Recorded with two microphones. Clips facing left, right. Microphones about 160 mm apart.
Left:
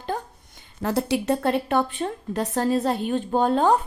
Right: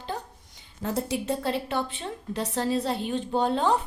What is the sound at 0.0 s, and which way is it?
A woman's voice, 50° left (ahead or behind).